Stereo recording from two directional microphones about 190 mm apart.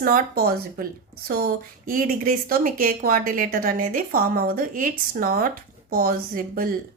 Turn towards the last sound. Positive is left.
turn(degrees=-50)  # may be behind; listen again after turning